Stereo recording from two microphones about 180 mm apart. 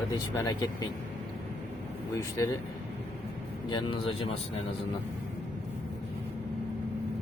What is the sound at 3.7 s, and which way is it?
Speech, 25° left (ahead or behind).